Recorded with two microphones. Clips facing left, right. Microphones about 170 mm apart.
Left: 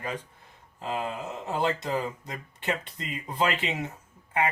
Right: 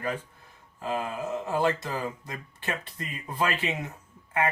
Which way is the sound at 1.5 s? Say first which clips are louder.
Even; 20° left (ahead or behind).